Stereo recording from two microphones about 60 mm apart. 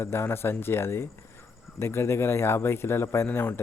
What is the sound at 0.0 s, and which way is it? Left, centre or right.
A man's voice, left.